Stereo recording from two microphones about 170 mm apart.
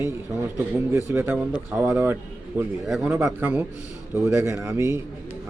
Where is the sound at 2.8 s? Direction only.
Centre (ahead or behind).